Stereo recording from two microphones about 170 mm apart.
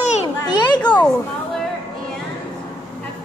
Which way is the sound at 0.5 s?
25° left (ahead or behind).